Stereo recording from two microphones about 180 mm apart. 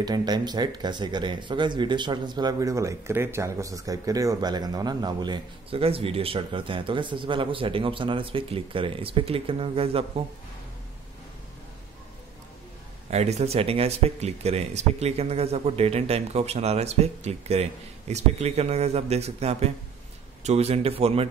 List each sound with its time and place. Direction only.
0.0 s speech: 20° right (ahead or behind)
13.1 s speech: 35° right (ahead or behind)